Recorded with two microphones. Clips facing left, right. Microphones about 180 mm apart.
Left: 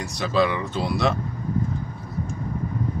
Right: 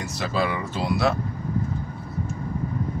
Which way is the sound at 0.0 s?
5° right (ahead or behind).